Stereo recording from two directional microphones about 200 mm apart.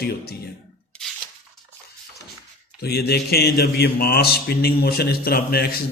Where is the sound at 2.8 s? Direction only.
55° left (ahead or behind).